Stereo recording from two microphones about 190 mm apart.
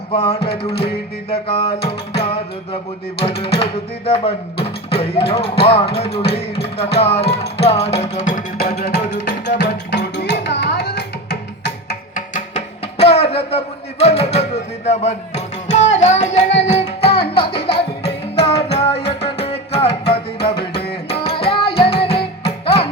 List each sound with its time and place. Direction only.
0.1 s music: 30° left (ahead or behind); by 11.9 s 60° left (ahead or behind)
12.1 s music: 40° left (ahead or behind)